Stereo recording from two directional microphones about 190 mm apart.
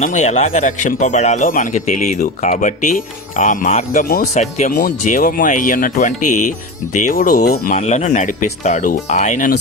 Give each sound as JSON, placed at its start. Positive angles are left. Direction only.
{"t": 0.0, "sound": "speech", "side_deg": 40}